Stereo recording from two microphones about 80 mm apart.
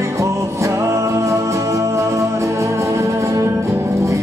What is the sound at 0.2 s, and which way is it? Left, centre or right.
Music, right.